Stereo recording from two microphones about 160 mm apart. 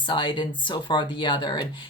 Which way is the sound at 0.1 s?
30° left (ahead or behind).